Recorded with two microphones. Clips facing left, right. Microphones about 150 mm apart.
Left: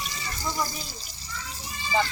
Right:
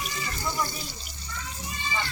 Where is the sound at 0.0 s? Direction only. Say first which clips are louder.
Right 1 dB; 35° left (ahead or behind).